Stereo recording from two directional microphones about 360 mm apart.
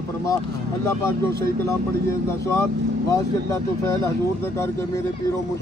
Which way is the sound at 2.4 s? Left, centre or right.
Centre.